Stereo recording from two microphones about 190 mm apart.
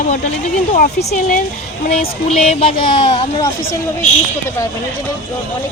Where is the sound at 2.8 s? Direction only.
25° left (ahead or behind).